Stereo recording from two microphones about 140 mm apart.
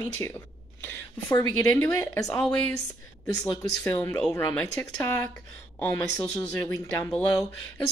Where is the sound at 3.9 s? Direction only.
20° left (ahead or behind).